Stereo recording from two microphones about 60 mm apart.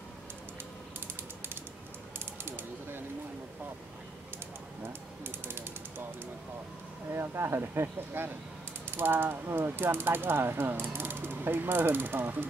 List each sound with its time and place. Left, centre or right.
2.1 s mechanisms: right
5.2 s ratchet: right
7.1 s speech: right
8.8 s mechanisms: right